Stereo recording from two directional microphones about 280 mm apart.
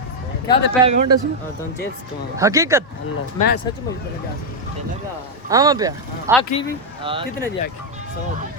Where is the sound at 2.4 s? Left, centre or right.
Centre.